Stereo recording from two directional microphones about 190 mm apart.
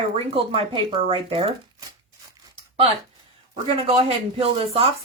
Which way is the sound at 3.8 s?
30° right (ahead or behind).